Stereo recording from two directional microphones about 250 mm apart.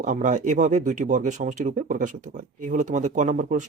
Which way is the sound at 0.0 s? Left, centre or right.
Right.